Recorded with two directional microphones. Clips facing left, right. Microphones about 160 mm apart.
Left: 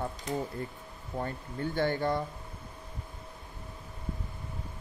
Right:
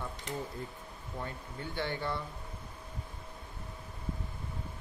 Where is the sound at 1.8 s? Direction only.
45° left (ahead or behind).